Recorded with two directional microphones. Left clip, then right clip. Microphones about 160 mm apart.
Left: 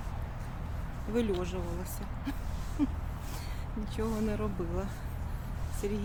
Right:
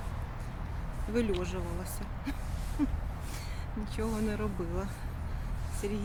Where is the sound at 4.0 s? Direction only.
5° right (ahead or behind).